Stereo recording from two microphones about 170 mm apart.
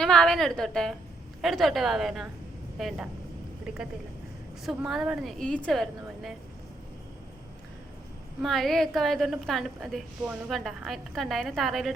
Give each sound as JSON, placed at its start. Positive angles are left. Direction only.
{"t": 0.0, "sound": "a woman's voice", "side_deg": 5}
{"t": 4.6, "sound": "a woman's voice", "side_deg": 0}
{"t": 8.4, "sound": "a woman's voice", "side_deg": 0}